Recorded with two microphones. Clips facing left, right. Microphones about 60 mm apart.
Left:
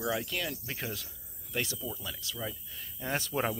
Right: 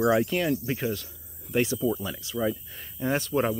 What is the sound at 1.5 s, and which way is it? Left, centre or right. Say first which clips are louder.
Speech: right 11 dB; right.